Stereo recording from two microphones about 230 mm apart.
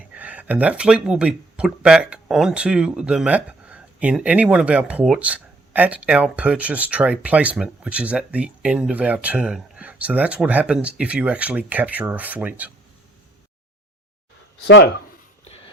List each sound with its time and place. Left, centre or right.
0.1 s speech: centre
14.6 s speech: left
15.4 s a sound: left